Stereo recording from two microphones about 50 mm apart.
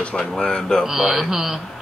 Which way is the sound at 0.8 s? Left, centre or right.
Centre.